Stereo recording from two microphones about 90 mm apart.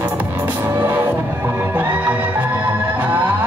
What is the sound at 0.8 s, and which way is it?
Music, 20° right (ahead or behind).